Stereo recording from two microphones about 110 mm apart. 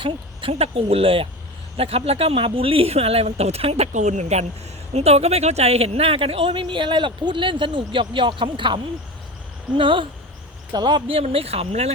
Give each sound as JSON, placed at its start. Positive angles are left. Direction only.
{"t": 0.0, "sound": "speech", "side_deg": -60}
{"t": 4.9, "sound": "speech", "side_deg": -75}
{"t": 11.2, "sound": "speech", "side_deg": -65}